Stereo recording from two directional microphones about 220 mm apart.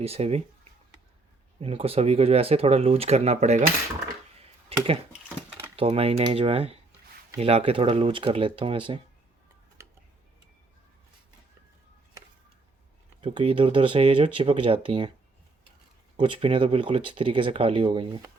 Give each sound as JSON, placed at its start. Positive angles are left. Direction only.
{"t": 0.0, "sound": "speech", "side_deg": -25}
{"t": 5.5, "sound": "a sound", "side_deg": -10}
{"t": 5.7, "sound": "speech", "side_deg": -25}
{"t": 13.2, "sound": "speech", "side_deg": -25}
{"t": 16.1, "sound": "speech", "side_deg": -25}